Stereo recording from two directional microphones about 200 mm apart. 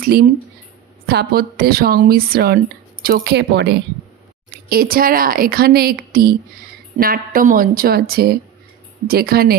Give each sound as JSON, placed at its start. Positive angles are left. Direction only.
{"t": 1.0, "sound": "a woman's voice", "side_deg": -50}
{"t": 4.6, "sound": "a woman's voice", "side_deg": -45}